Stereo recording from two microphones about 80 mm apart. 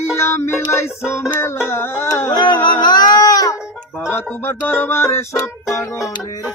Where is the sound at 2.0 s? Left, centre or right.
Left.